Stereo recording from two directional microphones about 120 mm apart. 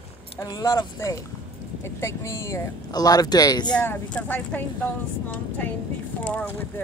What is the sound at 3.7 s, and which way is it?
Speech, 10° left (ahead or behind).